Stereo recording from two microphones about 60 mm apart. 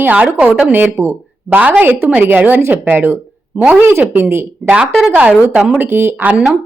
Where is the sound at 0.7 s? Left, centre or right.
Right.